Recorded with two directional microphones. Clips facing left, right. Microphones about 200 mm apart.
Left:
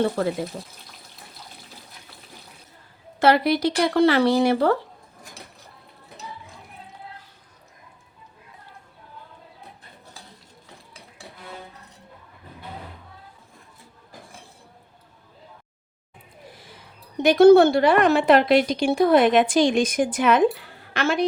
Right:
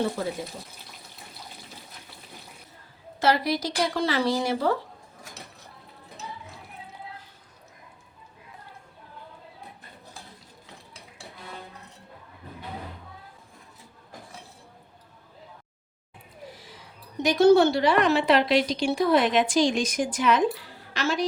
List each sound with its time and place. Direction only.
0.2 s speech: 65° left (ahead or behind)
3.2 s speech: 60° left (ahead or behind)
16.6 s a sound: 55° left (ahead or behind)
17.2 s a woman's voice: 55° left (ahead or behind)